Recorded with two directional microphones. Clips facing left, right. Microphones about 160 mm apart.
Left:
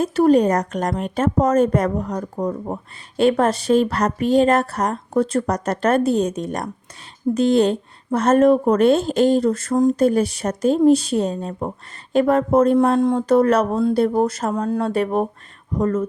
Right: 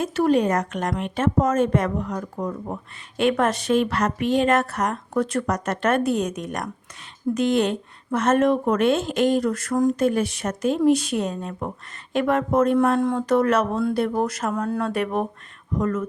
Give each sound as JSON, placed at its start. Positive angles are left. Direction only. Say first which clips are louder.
{"t": 0.0, "sound": "speech", "louder": "left 5 dB", "side_deg": 35}
{"t": 10.0, "sound": "speech", "louder": "left 4 dB", "side_deg": 35}